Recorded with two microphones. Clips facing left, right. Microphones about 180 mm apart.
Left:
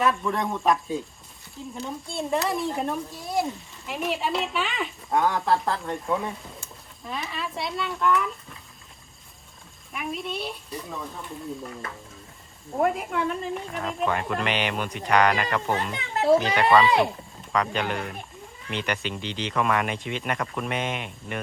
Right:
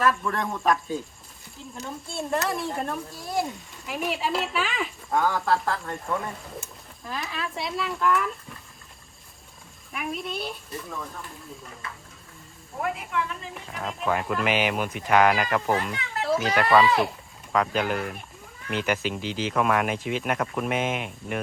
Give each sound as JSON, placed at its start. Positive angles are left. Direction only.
{"t": 0.0, "sound": "speech", "side_deg": 0}
{"t": 5.5, "sound": "speech", "side_deg": 25}
{"t": 5.9, "sound": "speech", "side_deg": 0}
{"t": 9.9, "sound": "speech", "side_deg": 0}
{"t": 12.8, "sound": "a child's voice", "side_deg": 40}
{"t": 13.5, "sound": "speech", "side_deg": 0}
{"t": 15.8, "sound": "a child's voice", "side_deg": 35}
{"t": 16.6, "sound": "speech", "side_deg": 0}